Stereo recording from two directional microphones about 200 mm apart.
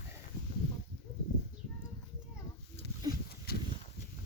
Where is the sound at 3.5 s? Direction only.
50° left (ahead or behind).